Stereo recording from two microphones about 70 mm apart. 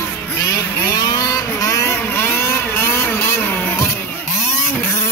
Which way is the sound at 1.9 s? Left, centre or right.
Left.